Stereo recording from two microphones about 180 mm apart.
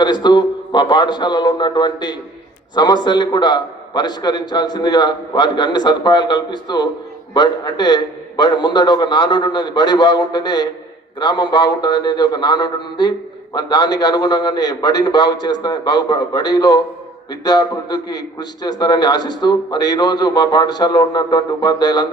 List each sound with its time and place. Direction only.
0.0 s a man's voice: 25° left (ahead or behind)